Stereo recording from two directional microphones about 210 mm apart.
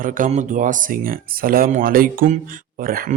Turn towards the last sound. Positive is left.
turn(degrees=-45)  # may be behind; listen again after turning